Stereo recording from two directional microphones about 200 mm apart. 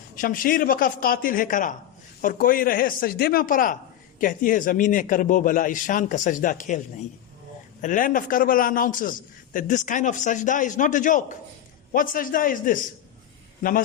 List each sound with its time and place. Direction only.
0.2 s a man's voice: 45° left (ahead or behind)